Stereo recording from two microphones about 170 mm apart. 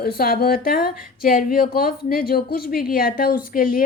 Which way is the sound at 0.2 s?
60° left (ahead or behind).